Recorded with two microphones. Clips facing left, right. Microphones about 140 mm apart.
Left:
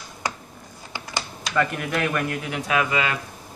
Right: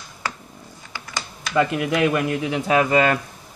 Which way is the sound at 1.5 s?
15° right (ahead or behind).